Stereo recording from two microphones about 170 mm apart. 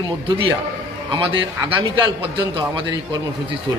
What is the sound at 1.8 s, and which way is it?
A man's voice, 30° right (ahead or behind).